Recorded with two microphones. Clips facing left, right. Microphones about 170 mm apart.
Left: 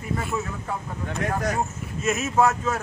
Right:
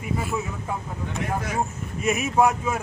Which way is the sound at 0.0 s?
5° right (ahead or behind).